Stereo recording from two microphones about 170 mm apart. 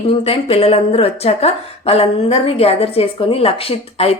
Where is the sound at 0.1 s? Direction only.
35° left (ahead or behind).